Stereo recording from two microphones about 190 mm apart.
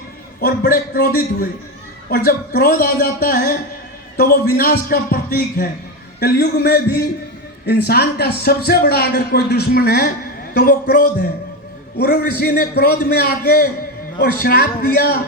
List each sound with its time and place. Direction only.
0.4 s a man's voice: 50° left (ahead or behind)